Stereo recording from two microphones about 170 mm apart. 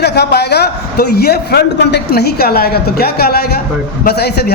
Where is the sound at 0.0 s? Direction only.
75° left (ahead or behind).